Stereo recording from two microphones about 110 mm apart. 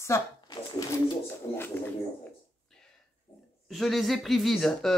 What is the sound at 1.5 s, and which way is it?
Speech, 20° left (ahead or behind).